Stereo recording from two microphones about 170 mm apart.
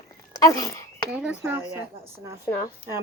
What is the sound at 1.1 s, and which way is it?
Speech, 5° right (ahead or behind).